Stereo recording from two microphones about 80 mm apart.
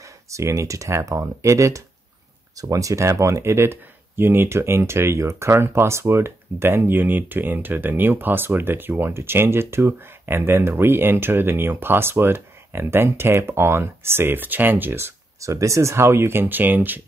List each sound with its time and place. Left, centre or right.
0.3 s speech: right